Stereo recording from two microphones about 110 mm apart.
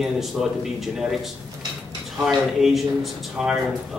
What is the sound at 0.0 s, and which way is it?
Speech, centre (ahead or behind).